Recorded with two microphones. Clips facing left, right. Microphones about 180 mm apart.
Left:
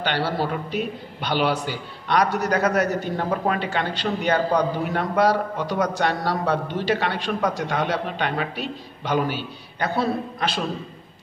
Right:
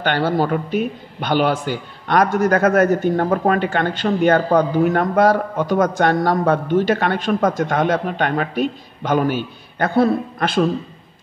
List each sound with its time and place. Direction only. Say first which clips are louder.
0.0 s a man's voice: right 6 dB; 50° right (ahead or behind)